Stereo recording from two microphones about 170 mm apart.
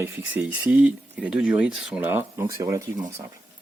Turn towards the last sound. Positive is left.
turn(degrees=-20)  # may be behind; listen again after turning